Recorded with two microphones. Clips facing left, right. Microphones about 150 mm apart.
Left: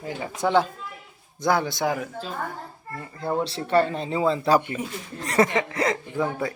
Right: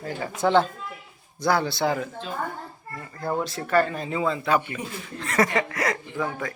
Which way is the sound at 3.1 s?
25° left (ahead or behind).